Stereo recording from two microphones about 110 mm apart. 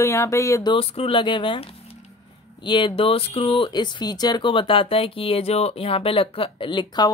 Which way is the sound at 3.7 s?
45° left (ahead or behind).